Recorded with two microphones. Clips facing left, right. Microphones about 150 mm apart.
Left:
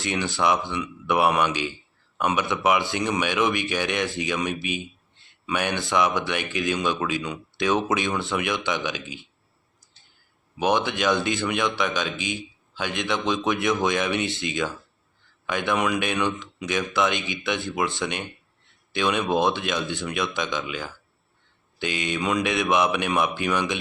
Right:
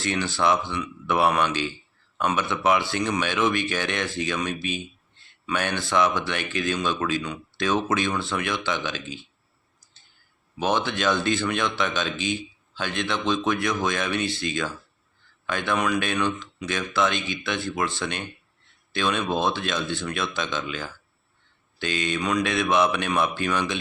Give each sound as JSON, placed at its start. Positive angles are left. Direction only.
{"t": 0.0, "sound": "speech", "side_deg": 15}
{"t": 10.6, "sound": "speech", "side_deg": 15}